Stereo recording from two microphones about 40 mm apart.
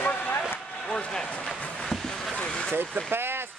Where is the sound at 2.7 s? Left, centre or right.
Right.